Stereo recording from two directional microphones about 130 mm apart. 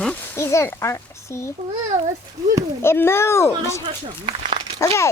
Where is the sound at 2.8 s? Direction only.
20° left (ahead or behind).